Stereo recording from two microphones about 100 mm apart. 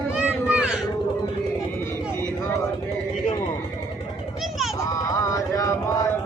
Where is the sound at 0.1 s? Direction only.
15° right (ahead or behind).